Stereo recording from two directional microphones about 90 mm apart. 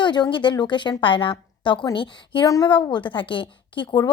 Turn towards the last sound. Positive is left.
turn(degrees=65)  # may be behind; listen again after turning